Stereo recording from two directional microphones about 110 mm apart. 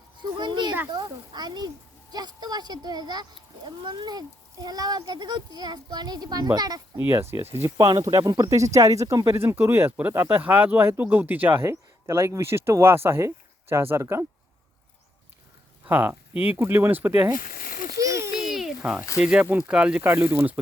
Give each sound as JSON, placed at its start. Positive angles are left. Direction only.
{"t": 0.2, "sound": "a child's voice", "side_deg": -45}
{"t": 6.9, "sound": "speech", "side_deg": -25}
{"t": 7.8, "sound": "speech", "side_deg": -35}
{"t": 15.9, "sound": "speech", "side_deg": -15}
{"t": 18.0, "sound": "a sound", "side_deg": -30}
{"t": 18.3, "sound": "a sound", "side_deg": -5}
{"t": 19.2, "sound": "speech", "side_deg": -10}
{"t": 20.1, "sound": "speech", "side_deg": -20}